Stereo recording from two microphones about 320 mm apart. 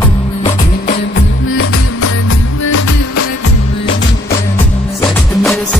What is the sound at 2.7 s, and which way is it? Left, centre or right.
Music, left.